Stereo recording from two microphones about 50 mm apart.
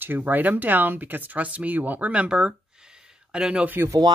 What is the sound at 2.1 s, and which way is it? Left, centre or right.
Speech, right.